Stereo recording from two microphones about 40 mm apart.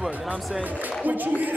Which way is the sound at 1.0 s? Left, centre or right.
Right.